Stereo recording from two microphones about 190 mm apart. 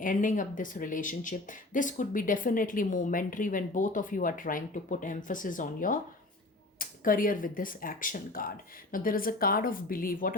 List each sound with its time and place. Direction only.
0.0 s speech: 45° left (ahead or behind)